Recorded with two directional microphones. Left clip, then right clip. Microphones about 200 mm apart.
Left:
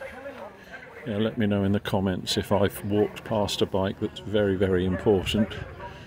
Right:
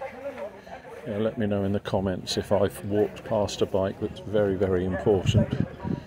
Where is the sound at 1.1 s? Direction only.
25° left (ahead or behind).